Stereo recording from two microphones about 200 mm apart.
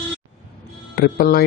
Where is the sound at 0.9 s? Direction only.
50° left (ahead or behind).